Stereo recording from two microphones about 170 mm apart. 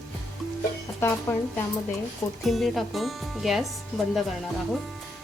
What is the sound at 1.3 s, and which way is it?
Speech, 15° left (ahead or behind).